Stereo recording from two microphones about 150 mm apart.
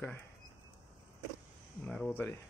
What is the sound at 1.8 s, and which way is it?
Speech, 10° left (ahead or behind).